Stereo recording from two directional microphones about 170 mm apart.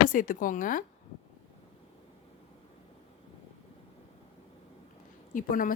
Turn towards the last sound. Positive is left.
turn(degrees=55)  # may be behind; listen again after turning